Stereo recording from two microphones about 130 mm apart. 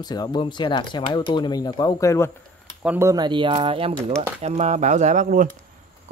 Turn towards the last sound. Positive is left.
turn(degrees=-75)  # may be behind; listen again after turning